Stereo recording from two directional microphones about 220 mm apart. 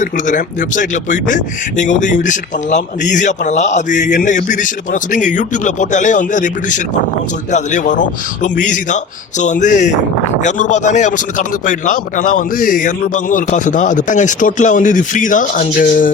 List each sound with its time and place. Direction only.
0.0 s speech: 35° left (ahead or behind)